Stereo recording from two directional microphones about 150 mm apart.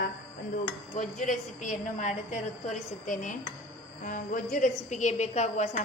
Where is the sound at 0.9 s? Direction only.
55° left (ahead or behind).